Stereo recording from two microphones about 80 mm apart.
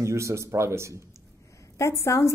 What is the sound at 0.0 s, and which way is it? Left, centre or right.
Speech, right.